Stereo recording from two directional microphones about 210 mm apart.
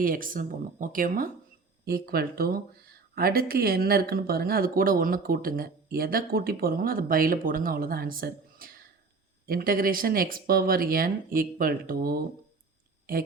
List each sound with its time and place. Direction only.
0.0 s speech: 40° right (ahead or behind)